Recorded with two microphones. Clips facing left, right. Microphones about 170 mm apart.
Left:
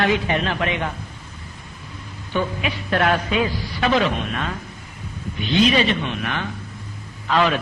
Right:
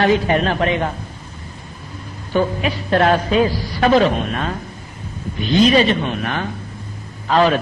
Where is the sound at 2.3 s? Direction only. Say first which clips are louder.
Right 5 dB; 40° right (ahead or behind).